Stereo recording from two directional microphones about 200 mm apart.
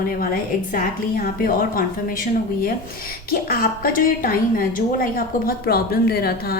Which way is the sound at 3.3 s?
45° left (ahead or behind).